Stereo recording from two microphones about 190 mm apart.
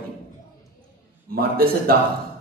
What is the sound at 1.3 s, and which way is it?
Speech, 50° right (ahead or behind).